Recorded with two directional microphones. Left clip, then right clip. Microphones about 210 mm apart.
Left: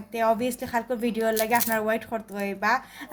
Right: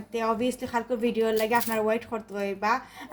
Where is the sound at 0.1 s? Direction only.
35° left (ahead or behind).